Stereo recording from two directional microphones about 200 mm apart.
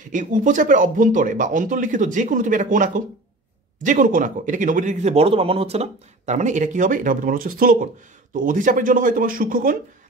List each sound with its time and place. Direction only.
0.0 s a man's voice: 40° right (ahead or behind)